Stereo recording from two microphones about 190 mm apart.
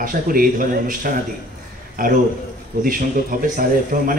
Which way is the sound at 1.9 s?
45° right (ahead or behind).